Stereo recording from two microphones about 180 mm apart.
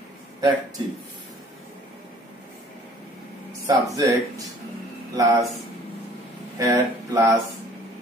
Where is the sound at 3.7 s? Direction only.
20° right (ahead or behind).